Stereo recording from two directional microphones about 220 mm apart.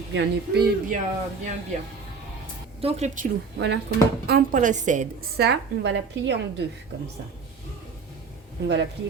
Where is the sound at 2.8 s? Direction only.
30° right (ahead or behind).